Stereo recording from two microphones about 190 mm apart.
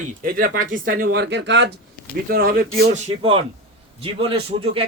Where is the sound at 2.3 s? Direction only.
50° right (ahead or behind).